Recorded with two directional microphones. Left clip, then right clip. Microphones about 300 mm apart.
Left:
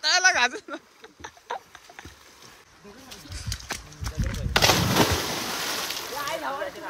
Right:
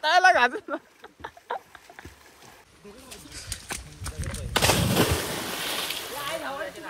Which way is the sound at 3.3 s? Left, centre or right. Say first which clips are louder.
Left 2 dB; centre.